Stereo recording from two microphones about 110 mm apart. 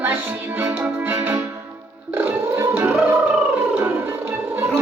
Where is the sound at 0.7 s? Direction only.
25° right (ahead or behind).